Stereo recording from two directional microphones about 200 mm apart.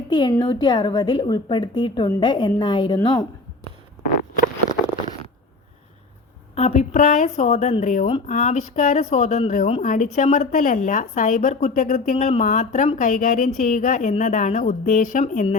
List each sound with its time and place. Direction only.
0.1 s a woman's voice: 20° left (ahead or behind)
6.5 s a woman's voice: 30° left (ahead or behind)
12.1 s a woman's voice: 30° left (ahead or behind)
12.4 s a woman's voice: 40° left (ahead or behind)